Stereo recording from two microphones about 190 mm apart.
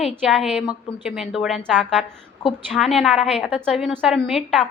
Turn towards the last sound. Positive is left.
turn(degrees=0)  # may be behind; listen again after turning